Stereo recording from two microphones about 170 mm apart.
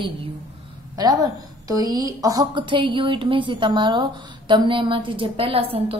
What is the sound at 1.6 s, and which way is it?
A woman's voice, 20° right (ahead or behind).